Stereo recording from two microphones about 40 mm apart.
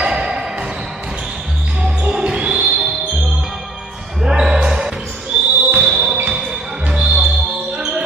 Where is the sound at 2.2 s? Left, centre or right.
Right.